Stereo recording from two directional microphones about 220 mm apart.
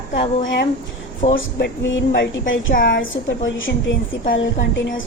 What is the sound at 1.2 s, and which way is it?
Speech, 30° left (ahead or behind).